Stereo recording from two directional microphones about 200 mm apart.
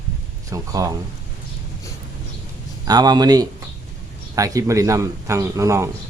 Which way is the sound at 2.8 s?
20° right (ahead or behind).